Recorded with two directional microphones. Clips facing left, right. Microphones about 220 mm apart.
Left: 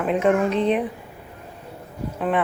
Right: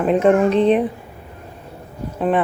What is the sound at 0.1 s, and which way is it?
Speech, 35° right (ahead or behind).